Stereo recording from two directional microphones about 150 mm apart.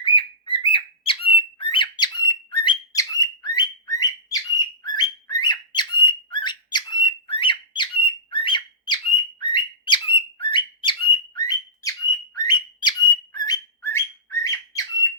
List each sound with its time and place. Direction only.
0.0 s bird: 35° left (ahead or behind)